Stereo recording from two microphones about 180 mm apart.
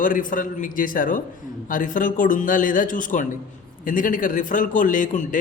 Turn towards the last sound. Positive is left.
turn(degrees=45)  # may be behind; listen again after turning